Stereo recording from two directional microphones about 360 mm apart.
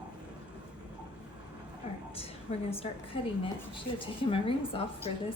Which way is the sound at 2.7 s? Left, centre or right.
Centre.